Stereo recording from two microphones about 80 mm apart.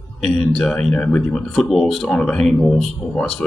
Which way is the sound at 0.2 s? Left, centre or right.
Centre.